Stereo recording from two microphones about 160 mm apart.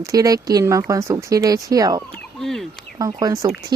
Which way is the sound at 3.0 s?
25° right (ahead or behind).